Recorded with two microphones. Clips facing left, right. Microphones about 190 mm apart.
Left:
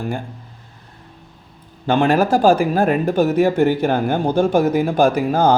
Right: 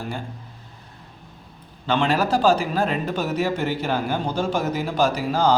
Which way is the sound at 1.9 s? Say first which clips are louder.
Left 5 dB; 50° left (ahead or behind).